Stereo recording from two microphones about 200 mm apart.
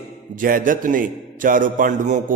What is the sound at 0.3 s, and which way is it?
A man's voice, 45° right (ahead or behind).